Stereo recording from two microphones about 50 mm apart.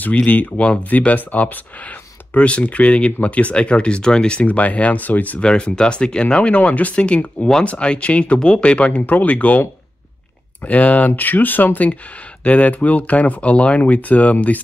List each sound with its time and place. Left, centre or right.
0.0 s speech: left
4.5 s speech: left
5.4 s speech: centre
10.6 s speech: left